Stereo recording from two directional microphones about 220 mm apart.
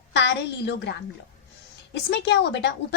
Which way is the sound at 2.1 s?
50° left (ahead or behind).